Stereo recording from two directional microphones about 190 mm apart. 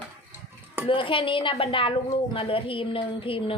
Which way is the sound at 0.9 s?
25° left (ahead or behind).